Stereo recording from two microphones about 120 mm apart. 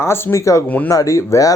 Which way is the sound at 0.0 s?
20° left (ahead or behind).